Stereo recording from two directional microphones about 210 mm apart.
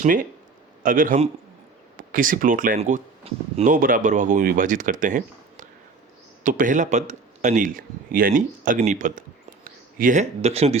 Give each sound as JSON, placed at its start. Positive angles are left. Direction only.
{"t": 0.0, "sound": "speech", "side_deg": -40}